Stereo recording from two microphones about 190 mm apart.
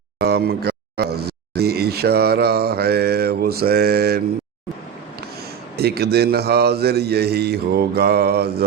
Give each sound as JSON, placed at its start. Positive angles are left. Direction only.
{"t": 0.2, "sound": "speech", "side_deg": -60}
{"t": 5.7, "sound": "a man's voice", "side_deg": -55}